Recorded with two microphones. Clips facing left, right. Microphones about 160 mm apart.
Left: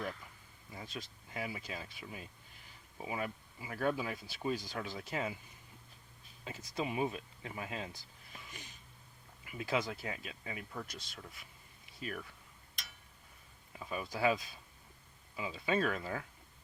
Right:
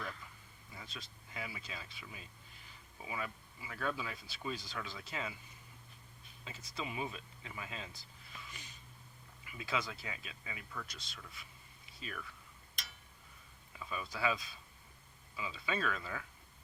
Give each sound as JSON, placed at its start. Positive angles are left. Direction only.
{"t": 0.7, "sound": "speech", "side_deg": 45}
{"t": 6.4, "sound": "speech", "side_deg": 50}
{"t": 8.3, "sound": "a sound", "side_deg": 45}
{"t": 9.5, "sound": "speech", "side_deg": 50}
{"t": 13.7, "sound": "speech", "side_deg": 40}